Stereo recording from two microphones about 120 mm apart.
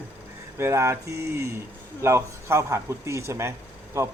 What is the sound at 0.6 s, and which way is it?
Speech, 20° right (ahead or behind).